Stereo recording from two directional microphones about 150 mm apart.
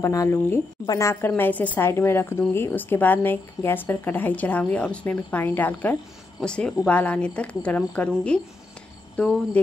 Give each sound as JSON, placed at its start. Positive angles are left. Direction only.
{"t": 0.0, "sound": "a woman's voice", "side_deg": 20}
{"t": 9.1, "sound": "cricket", "side_deg": 5}